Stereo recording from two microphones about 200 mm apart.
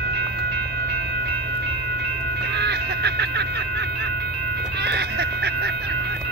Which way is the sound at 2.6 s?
55° right (ahead or behind).